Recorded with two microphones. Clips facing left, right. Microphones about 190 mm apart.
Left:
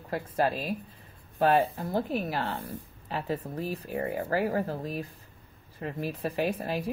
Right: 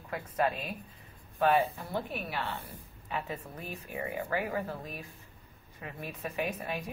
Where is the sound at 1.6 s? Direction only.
45° left (ahead or behind).